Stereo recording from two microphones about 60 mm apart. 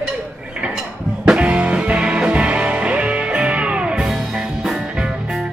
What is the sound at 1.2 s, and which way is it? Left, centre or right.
Music, centre.